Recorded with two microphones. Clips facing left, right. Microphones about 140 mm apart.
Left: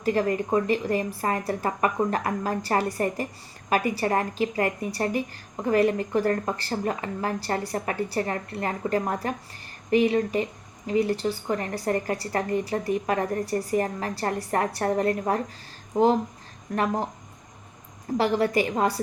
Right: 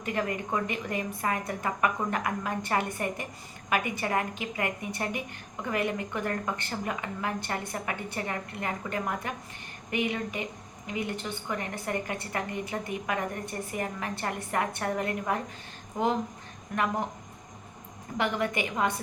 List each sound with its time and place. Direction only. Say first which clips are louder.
0.0 s speech: left 7 dB; 35° left (ahead or behind)
18.2 s speech: left 6 dB; 35° left (ahead or behind)